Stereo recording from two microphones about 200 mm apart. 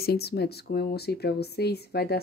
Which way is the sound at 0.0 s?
50° left (ahead or behind).